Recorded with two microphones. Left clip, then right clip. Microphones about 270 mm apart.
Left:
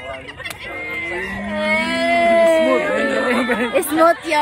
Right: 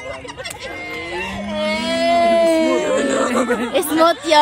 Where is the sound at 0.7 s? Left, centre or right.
Right.